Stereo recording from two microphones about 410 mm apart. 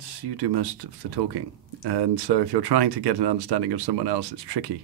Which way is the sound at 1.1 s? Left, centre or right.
Right.